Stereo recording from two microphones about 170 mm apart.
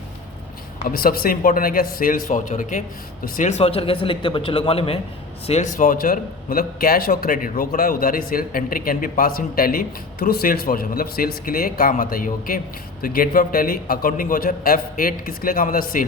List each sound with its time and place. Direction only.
0.9 s a man's voice: 60° left (ahead or behind)